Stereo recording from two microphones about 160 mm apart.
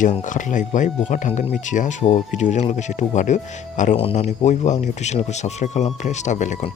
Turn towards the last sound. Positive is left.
turn(degrees=45)  # may be behind; listen again after turning